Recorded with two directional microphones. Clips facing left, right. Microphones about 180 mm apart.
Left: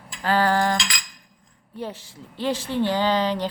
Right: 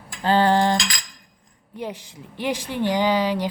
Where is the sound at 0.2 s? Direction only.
25° right (ahead or behind).